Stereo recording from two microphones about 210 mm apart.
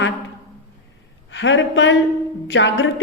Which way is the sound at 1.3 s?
60° left (ahead or behind).